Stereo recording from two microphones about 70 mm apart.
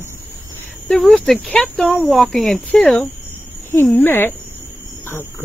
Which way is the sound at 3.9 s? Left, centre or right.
Left.